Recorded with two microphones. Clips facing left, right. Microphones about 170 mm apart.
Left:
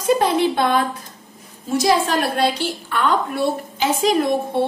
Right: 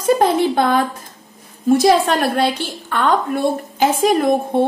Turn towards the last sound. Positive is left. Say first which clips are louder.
# right 3 dB
turn(degrees=-50)  # may be behind; listen again after turning